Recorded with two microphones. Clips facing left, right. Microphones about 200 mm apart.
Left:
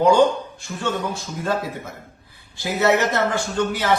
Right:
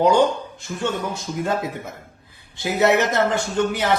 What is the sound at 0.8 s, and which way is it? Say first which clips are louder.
Speech: even; 20° right (ahead or behind).